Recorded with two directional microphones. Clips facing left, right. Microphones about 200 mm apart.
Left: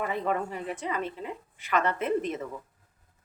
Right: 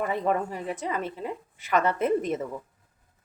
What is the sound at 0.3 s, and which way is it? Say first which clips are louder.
A woman's voice: right 3 dB; 40° right (ahead or behind).